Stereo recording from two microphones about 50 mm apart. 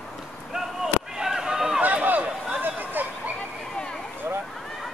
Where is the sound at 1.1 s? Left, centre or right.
Centre.